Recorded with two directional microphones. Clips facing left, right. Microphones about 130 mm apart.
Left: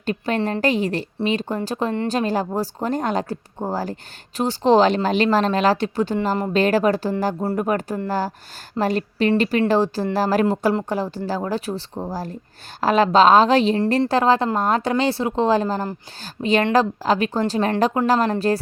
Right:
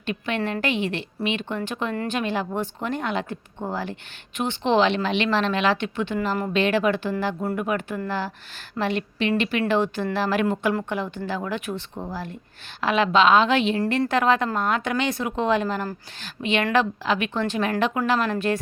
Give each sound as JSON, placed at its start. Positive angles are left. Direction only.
{"t": 0.0, "sound": "a woman's voice", "side_deg": 40}